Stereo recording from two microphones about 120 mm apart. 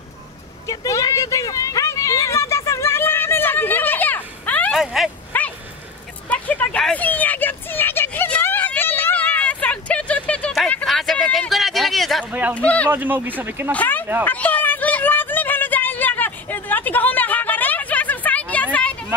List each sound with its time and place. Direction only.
0.7 s a sound: 30° left (ahead or behind); by 4.7 s 15° left (ahead or behind)
4.7 s speech: centre (ahead or behind)
5.3 s dog: 15° left (ahead or behind)
6.2 s a sound: 10° left (ahead or behind)
12.3 s speech: 15° right (ahead or behind)
12.5 s speech: 10° left (ahead or behind)
12.9 s speech: 15° right (ahead or behind)
13.7 s speech: 15° left (ahead or behind)
14.2 s a sound: 10° left (ahead or behind)